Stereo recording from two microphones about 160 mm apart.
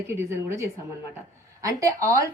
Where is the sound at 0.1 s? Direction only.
15° right (ahead or behind).